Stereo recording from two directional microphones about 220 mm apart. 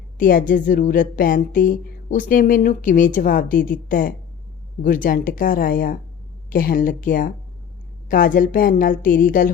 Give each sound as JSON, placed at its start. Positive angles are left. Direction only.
{"t": 0.2, "sound": "a woman's voice", "side_deg": 40}